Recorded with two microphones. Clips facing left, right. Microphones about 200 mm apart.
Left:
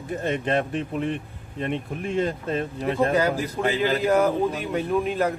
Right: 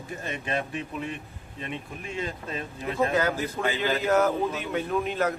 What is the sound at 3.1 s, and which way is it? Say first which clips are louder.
Speech: left 3 dB; 10° left (ahead or behind).